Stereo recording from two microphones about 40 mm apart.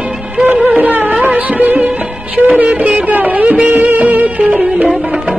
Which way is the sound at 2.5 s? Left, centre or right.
Right.